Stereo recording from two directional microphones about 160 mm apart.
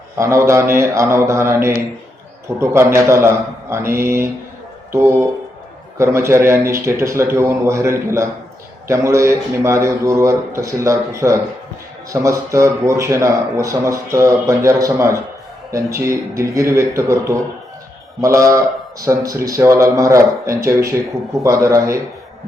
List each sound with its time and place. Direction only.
0.2 s a man's voice: 15° right (ahead or behind)